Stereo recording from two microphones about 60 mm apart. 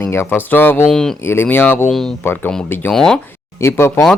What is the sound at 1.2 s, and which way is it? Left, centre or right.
Speech, left.